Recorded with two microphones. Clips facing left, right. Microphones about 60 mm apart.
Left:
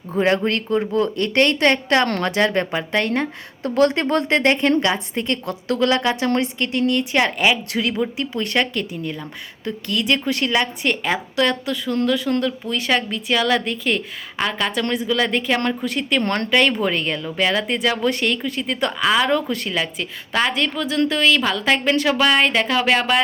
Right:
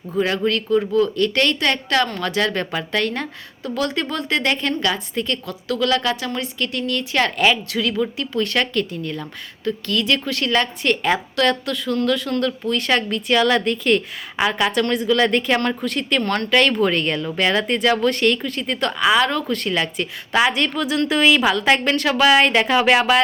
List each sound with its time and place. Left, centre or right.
0.1 s a woman's voice: left
3.6 s a woman's voice: left
6.6 s speech: left
7.7 s a woman's voice: left; by 14.8 s centre
14.8 s a woman's voice: centre
16.2 s a woman's voice: left
16.5 s a woman's voice: centre